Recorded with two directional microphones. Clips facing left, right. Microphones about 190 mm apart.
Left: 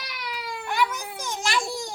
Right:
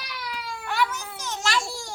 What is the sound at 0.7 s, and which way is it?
Babbling, 15° left (ahead or behind).